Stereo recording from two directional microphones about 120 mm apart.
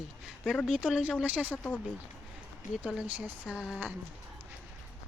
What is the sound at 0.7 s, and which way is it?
Speech, 10° right (ahead or behind).